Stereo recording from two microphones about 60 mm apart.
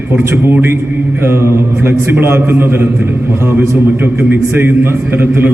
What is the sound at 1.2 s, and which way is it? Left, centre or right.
A man's voice, right.